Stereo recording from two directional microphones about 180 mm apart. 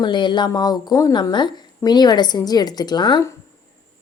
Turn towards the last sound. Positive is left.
turn(degrees=20)  # may be behind; listen again after turning